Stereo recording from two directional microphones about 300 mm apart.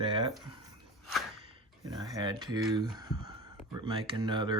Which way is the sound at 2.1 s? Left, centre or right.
Centre.